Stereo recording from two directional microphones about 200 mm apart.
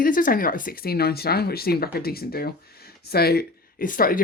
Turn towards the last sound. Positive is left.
turn(degrees=45)  # may be behind; listen again after turning